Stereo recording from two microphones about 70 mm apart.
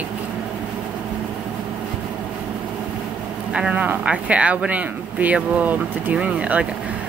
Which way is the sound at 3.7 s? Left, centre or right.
Right.